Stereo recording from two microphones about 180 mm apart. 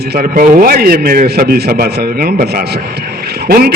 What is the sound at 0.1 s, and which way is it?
A man's voice, 55° right (ahead or behind).